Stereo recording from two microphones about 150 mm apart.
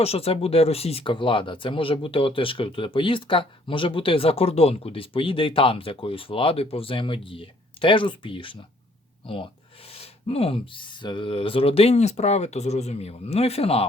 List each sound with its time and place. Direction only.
0.0 s speech: 40° left (ahead or behind)